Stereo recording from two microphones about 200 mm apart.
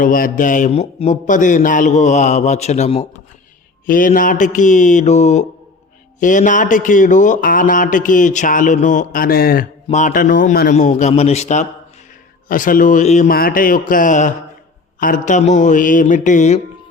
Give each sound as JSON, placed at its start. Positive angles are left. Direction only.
{"t": 0.0, "sound": "speech", "side_deg": 45}
{"t": 3.8, "sound": "speech", "side_deg": 45}